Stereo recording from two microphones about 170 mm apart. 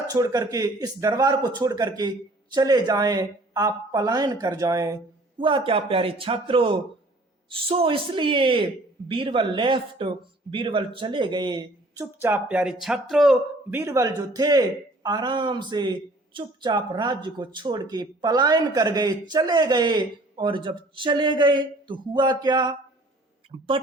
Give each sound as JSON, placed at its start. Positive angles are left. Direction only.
{"t": 0.1, "sound": "speech", "side_deg": -20}
{"t": 5.4, "sound": "speech", "side_deg": -30}
{"t": 12.2, "sound": "speech", "side_deg": -10}
{"t": 13.7, "sound": "speech", "side_deg": -15}